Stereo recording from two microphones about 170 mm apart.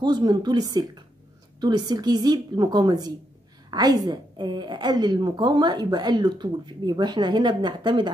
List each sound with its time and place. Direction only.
0.0 s a woman's voice: 25° right (ahead or behind)